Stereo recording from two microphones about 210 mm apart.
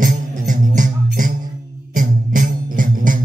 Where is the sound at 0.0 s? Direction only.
40° right (ahead or behind).